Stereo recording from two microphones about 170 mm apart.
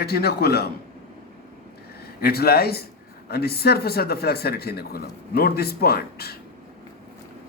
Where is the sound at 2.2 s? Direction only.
65° left (ahead or behind).